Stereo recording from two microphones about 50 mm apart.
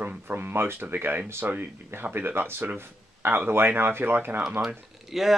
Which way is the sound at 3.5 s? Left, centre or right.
Right.